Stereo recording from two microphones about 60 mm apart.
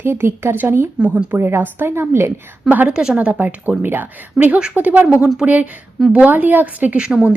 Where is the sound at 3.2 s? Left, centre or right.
Right.